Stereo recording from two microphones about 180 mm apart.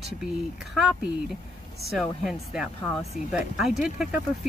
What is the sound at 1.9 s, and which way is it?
Speech, centre (ahead or behind).